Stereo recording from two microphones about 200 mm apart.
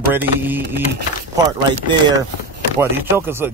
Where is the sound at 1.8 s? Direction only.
20° right (ahead or behind).